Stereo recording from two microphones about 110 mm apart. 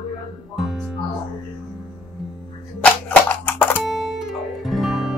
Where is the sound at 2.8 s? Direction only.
15° left (ahead or behind).